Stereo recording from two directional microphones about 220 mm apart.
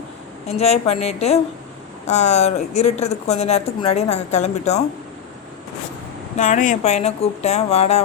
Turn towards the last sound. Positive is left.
turn(degrees=30)  # may be behind; listen again after turning